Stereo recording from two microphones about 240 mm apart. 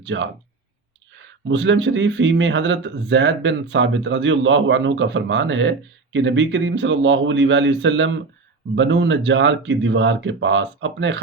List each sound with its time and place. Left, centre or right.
0.0 s speech: right
1.5 s speech: right